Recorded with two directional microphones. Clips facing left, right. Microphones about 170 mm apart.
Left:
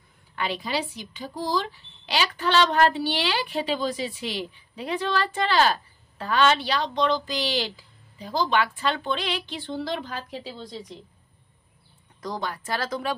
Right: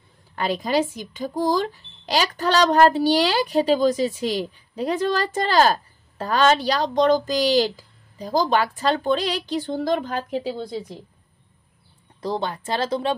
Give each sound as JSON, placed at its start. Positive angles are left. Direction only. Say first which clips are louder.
{"t": 0.4, "sound": "speech", "louder": "right 7 dB", "side_deg": -45}
{"t": 12.2, "sound": "speech", "louder": "right 5 dB", "side_deg": -30}